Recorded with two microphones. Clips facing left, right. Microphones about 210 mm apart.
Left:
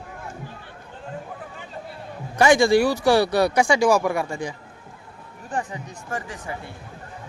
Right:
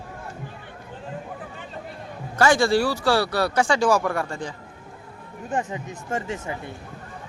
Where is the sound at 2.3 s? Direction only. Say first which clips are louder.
Left 3 dB; 15° left (ahead or behind).